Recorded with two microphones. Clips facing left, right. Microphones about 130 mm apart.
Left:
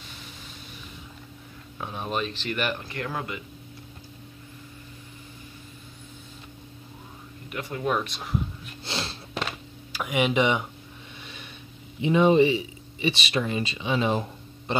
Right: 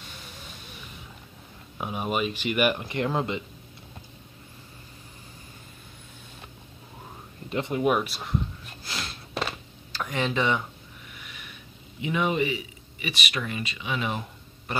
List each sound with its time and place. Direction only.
1.8 s speech: 10° right (ahead or behind)
7.4 s speech: 25° right (ahead or behind)
7.8 s speech: 10° right (ahead or behind)
8.8 s a sound: 30° left (ahead or behind)
9.3 s a sound: 5° right (ahead or behind)
9.9 s speech: 10° left (ahead or behind)
11.1 s snort: 30° left (ahead or behind)
12.0 s speech: 30° left (ahead or behind)
14.7 s a sound: 25° left (ahead or behind)